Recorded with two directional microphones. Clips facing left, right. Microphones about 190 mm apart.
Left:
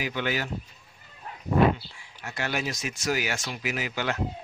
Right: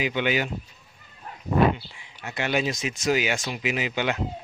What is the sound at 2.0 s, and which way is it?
Speech, 20° right (ahead or behind).